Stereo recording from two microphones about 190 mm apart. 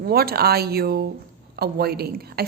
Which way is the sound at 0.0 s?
55° right (ahead or behind).